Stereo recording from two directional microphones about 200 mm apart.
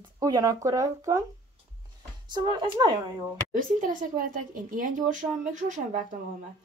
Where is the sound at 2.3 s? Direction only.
20° right (ahead or behind).